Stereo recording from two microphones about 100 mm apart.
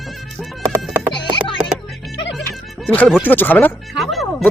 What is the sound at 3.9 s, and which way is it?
Speech, centre (ahead or behind).